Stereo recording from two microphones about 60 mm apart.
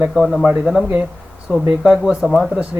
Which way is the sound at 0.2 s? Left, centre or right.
Centre.